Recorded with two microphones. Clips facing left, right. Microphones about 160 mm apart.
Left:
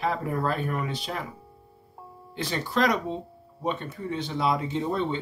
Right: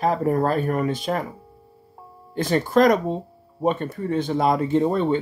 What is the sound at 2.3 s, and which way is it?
Speech, 50° right (ahead or behind).